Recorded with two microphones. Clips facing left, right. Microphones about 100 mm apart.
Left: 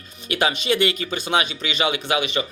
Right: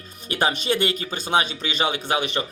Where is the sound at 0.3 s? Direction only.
40° right (ahead or behind).